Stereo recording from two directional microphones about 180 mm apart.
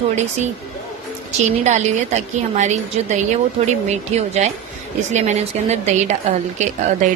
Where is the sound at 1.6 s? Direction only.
40° right (ahead or behind).